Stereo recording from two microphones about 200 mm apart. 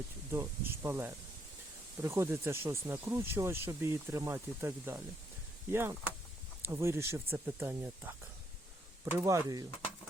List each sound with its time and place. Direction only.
0.3 s speech: 10° right (ahead or behind)
9.1 s speech: 15° right (ahead or behind)